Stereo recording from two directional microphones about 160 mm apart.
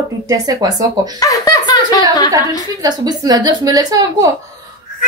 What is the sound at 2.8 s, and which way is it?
Speech, 25° right (ahead or behind).